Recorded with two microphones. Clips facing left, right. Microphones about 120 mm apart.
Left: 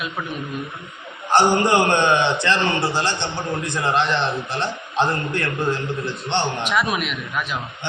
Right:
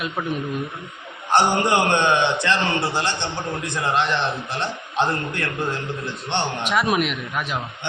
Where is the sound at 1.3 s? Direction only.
15° right (ahead or behind).